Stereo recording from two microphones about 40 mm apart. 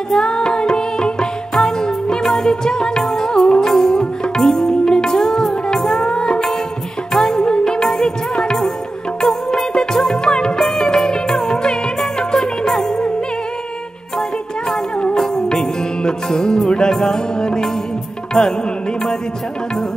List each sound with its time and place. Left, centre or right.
0.1 s music: centre
15.1 s music: centre